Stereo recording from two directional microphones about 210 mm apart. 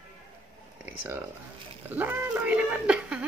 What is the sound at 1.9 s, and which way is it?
Speech, 10° right (ahead or behind).